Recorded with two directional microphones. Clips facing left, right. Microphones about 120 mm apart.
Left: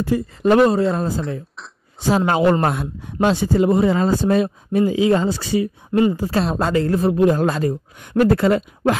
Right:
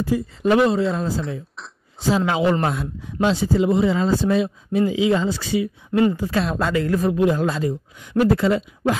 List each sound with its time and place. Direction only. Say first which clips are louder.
0.4 s a woman's voice: left 3 dB; 45° left (ahead or behind)
7.3 s speech: left 3 dB; 55° left (ahead or behind)